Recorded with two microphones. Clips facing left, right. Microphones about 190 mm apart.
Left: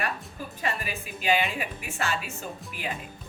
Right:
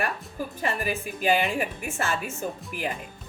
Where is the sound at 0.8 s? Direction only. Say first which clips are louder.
Right 7 dB; 50° right (ahead or behind).